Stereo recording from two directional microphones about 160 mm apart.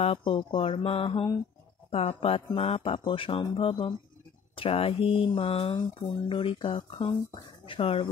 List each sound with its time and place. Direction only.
0.0 s speech: 35° left (ahead or behind)